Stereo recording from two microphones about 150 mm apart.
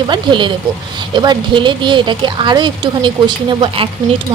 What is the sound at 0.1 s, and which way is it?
Speech, 30° right (ahead or behind).